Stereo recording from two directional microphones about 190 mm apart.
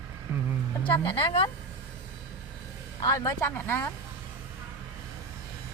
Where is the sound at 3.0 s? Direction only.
15° left (ahead or behind).